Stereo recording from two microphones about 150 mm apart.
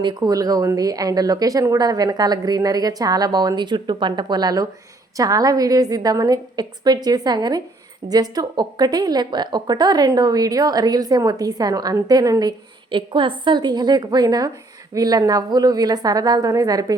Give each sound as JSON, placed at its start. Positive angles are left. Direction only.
{"t": 0.0, "sound": "a woman's voice", "side_deg": -25}